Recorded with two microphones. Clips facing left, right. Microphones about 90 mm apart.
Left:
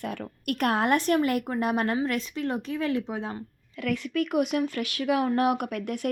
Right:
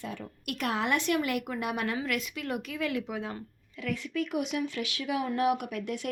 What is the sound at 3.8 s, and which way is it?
Speech, 60° left (ahead or behind).